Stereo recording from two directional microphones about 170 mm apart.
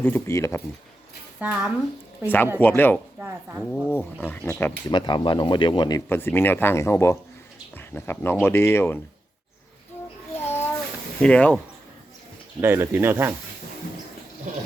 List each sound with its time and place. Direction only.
0.0 s speech: 15° left (ahead or behind)
1.4 s speech: 10° right (ahead or behind)
2.6 s speech: 10° left (ahead or behind)
3.2 s speech: 15° right (ahead or behind)
3.7 s speech: 10° left (ahead or behind)
4.9 s speech: 25° left (ahead or behind)
6.1 s speech: 15° left (ahead or behind)
10.3 s a sound: 15° left (ahead or behind)
11.2 s speech: 5° left (ahead or behind)
12.5 s speech: 15° right (ahead or behind)